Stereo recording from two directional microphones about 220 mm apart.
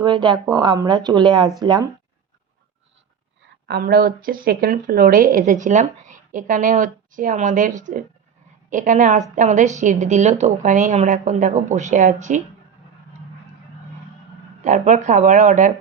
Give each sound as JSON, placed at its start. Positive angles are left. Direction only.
{"t": 0.0, "sound": "speech", "side_deg": -20}
{"t": 3.7, "sound": "speech", "side_deg": -45}
{"t": 14.6, "sound": "speech", "side_deg": -35}